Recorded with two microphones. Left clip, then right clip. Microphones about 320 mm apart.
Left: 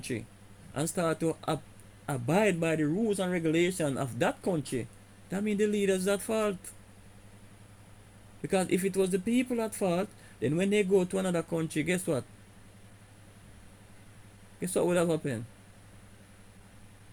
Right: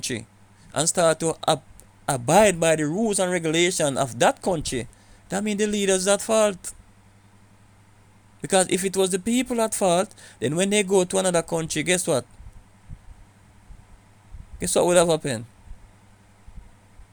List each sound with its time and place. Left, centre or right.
0.0 s speech: right
8.4 s speech: right
14.6 s speech: right